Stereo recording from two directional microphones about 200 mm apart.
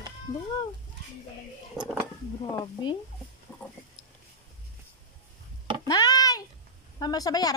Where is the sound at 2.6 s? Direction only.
25° left (ahead or behind).